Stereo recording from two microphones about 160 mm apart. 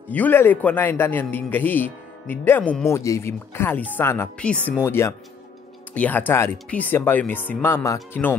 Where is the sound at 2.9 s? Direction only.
20° left (ahead or behind).